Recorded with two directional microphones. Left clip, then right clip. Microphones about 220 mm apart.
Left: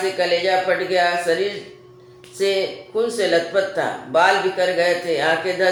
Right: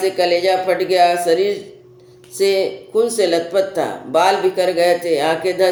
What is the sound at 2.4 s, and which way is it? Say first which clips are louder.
Speech: right 4 dB; 55° right (ahead or behind).